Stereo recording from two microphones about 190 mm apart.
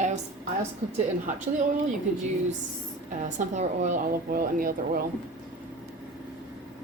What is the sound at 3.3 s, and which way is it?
Speech, 40° right (ahead or behind).